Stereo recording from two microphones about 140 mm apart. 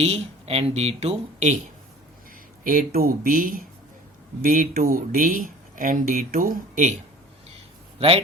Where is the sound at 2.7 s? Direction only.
90° right; by 6.9 s 75° right (ahead or behind).